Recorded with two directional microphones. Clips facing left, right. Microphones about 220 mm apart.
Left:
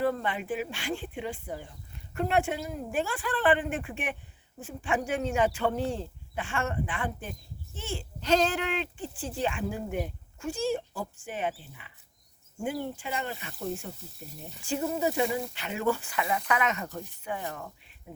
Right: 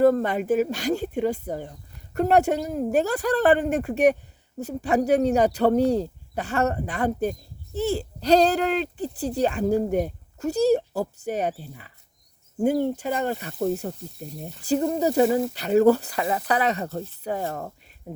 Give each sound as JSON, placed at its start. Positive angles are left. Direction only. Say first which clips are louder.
{"t": 0.0, "sound": "speech", "louder": "right 10 dB", "side_deg": -45}